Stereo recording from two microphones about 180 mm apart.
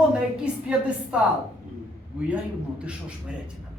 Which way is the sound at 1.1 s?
5° right (ahead or behind).